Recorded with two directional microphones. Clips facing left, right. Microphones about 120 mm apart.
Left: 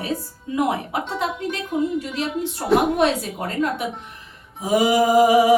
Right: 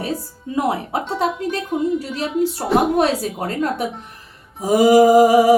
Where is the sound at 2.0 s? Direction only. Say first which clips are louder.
Right 1 dB; 35° right (ahead or behind).